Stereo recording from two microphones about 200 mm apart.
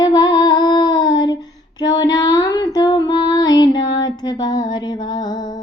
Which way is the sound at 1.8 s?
20° left (ahead or behind).